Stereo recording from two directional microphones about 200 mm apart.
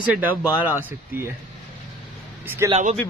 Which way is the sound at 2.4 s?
15° right (ahead or behind).